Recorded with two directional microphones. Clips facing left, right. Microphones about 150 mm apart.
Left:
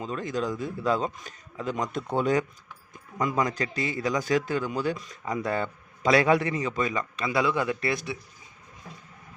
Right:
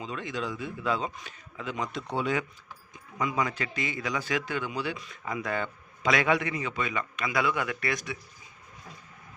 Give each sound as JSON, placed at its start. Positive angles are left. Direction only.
{"t": 0.0, "sound": "a man's voice", "side_deg": 40}